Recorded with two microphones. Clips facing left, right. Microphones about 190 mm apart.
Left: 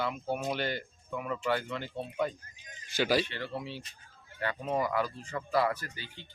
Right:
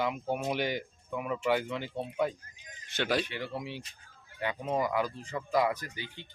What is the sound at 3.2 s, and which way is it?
Speech, 15° right (ahead or behind).